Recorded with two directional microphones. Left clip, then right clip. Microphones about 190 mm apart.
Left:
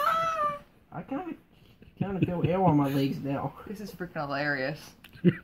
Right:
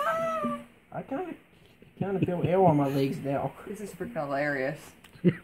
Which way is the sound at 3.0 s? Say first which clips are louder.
Right 2 dB; 20° right (ahead or behind).